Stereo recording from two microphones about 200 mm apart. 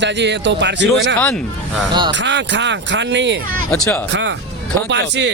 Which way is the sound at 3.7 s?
10° left (ahead or behind).